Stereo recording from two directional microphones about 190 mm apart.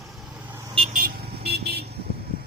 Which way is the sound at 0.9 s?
50° right (ahead or behind).